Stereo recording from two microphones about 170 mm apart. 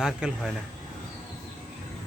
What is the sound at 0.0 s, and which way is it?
Speech, 5° right (ahead or behind).